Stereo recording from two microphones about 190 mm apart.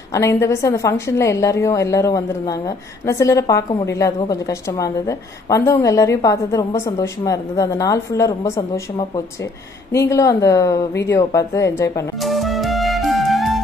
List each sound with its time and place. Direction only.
0.1 s a woman's voice: 15° left (ahead or behind)
12.2 s music: centre (ahead or behind)